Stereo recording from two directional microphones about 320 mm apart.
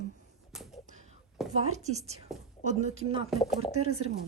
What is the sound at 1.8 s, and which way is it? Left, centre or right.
A woman's voice, right.